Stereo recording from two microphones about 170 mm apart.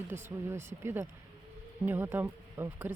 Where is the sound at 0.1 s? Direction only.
15° right (ahead or behind).